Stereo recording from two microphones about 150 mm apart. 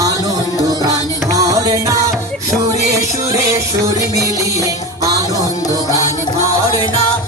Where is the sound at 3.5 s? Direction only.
20° right (ahead or behind).